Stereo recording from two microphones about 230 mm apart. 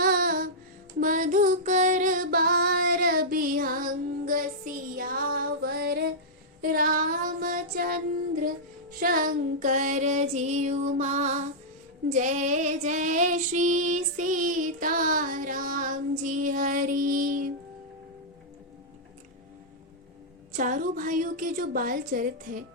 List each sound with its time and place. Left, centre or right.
0.0 s music: right
0.9 s female singing: right
6.6 s child singing: right
9.0 s female singing: right
20.5 s female singing: right